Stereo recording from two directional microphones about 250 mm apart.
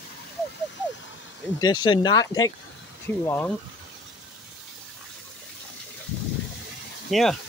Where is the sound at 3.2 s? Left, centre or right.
Centre.